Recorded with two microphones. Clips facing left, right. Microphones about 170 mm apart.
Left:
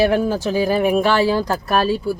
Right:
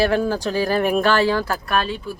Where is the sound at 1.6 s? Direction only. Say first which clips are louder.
Left 4 dB; 40° left (ahead or behind).